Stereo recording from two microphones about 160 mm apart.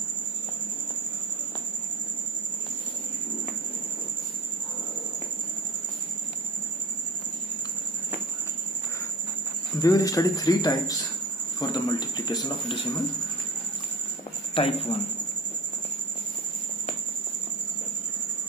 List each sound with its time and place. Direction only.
9.8 s speech: 20° left (ahead or behind)
14.5 s speech: 35° left (ahead or behind)